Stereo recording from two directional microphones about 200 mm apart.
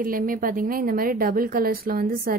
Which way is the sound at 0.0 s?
45° right (ahead or behind).